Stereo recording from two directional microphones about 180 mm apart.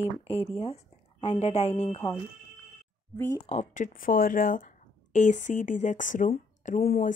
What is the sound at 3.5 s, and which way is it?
Speech, 40° left (ahead or behind).